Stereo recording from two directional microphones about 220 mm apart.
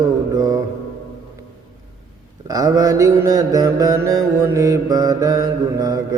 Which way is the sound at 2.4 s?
15° right (ahead or behind).